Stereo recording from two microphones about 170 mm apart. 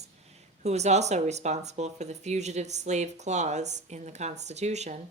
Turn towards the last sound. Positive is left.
turn(degrees=-40)  # may be behind; listen again after turning